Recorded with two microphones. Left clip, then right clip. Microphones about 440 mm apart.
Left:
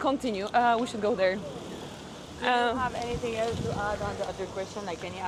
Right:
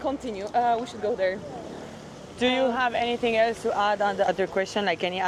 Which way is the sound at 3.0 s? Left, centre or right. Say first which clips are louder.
Right 7 dB; right.